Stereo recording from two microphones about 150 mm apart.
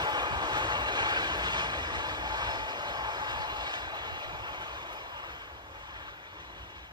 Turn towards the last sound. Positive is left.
turn(degrees=-30)  # may be behind; listen again after turning